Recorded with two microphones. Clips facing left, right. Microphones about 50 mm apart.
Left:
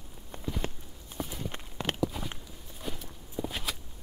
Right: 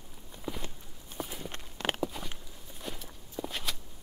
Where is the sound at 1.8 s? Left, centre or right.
Right.